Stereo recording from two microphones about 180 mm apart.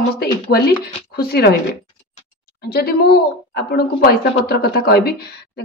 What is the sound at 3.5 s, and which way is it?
Speech, 60° left (ahead or behind).